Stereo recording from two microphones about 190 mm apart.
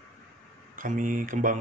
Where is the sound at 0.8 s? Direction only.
45° right (ahead or behind).